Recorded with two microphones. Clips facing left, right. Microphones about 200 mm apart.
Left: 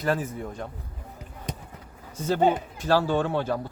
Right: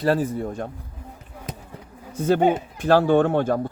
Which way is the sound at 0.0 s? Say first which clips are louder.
Right 6 dB; 35° right (ahead or behind).